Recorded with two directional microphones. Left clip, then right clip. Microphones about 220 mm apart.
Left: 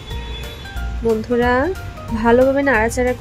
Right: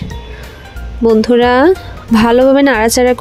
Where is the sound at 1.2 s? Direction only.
40° right (ahead or behind).